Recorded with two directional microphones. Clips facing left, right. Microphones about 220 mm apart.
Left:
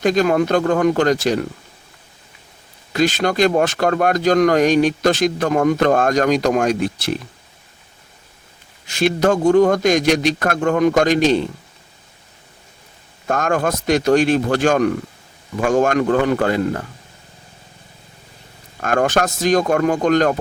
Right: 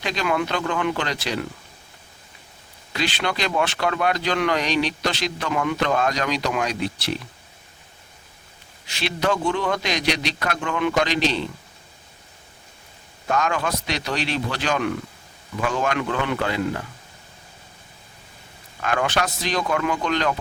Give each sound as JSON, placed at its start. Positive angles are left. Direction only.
{"t": 0.0, "sound": "speech", "side_deg": 45}
{"t": 2.9, "sound": "speech", "side_deg": 45}
{"t": 8.9, "sound": "speech", "side_deg": 45}
{"t": 13.2, "sound": "speech", "side_deg": 50}
{"t": 18.8, "sound": "speech", "side_deg": 45}